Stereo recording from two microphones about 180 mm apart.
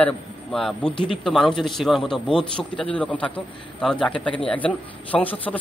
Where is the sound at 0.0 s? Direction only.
5° left (ahead or behind).